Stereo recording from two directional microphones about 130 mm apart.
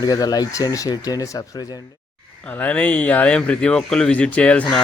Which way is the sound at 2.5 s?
15° left (ahead or behind).